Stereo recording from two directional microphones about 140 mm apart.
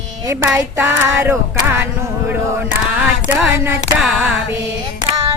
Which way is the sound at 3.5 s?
15° right (ahead or behind).